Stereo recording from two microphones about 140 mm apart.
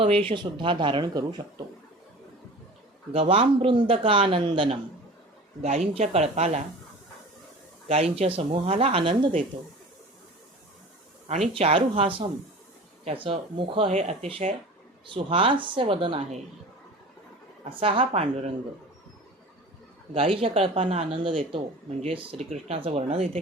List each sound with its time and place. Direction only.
0.0 s a man's voice: 40° right (ahead or behind)
3.1 s a man's voice: 40° right (ahead or behind)
5.6 s speech: 50° right (ahead or behind)
7.9 s speech: 45° right (ahead or behind)
11.5 s a man's voice: 40° right (ahead or behind)
17.7 s a man's voice: 40° right (ahead or behind)
20.1 s a man's voice: 40° right (ahead or behind)